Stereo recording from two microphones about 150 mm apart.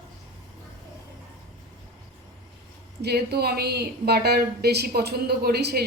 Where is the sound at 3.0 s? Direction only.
90° right.